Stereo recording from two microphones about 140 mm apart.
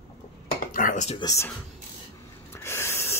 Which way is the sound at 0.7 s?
75° left (ahead or behind).